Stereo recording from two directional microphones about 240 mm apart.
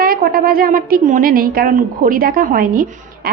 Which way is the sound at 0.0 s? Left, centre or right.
Right.